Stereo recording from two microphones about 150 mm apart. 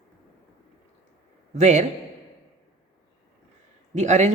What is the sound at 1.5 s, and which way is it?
Speech, 50° right (ahead or behind).